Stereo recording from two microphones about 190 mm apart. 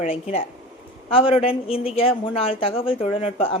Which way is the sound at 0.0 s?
30° left (ahead or behind).